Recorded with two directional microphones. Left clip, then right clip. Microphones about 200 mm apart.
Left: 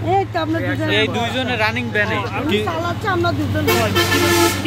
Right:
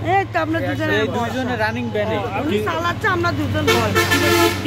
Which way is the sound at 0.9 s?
35° right (ahead or behind).